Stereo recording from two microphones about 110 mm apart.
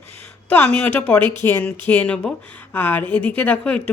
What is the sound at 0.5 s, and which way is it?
Speech, 15° left (ahead or behind).